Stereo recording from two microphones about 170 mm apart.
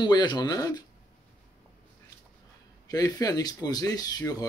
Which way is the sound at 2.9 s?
20° left (ahead or behind).